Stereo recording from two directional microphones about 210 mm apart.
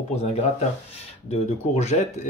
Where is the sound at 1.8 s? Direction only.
35° left (ahead or behind).